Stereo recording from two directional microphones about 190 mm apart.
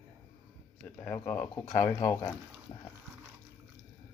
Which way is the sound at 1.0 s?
10° left (ahead or behind).